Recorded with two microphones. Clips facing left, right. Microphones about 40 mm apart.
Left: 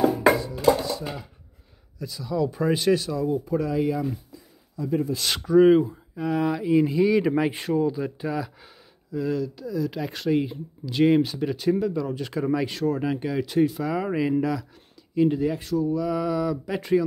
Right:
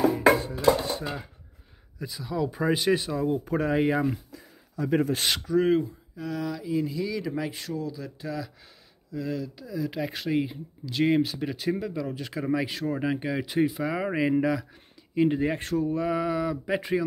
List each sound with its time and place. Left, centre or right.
0.4 s dishes: right
2.0 s speech: centre
2.9 s speech: right
3.4 s speech: right
4.3 s a sound: right
5.4 s speech: centre
9.1 s speech: centre; by 15.5 s right
15.5 s speech: right
16.2 s speech: centre